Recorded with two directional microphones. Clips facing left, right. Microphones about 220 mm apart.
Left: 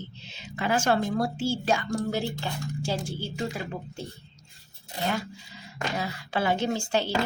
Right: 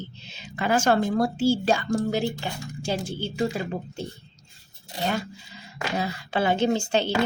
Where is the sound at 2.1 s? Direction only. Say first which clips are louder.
Right 3 dB; 15° right (ahead or behind).